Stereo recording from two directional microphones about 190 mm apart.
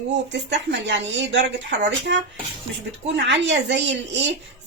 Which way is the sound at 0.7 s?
70° right (ahead or behind).